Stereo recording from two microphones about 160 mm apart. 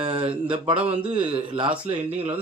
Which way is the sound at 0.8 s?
10° right (ahead or behind).